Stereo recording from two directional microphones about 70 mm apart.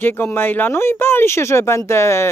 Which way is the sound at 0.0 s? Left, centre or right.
Left.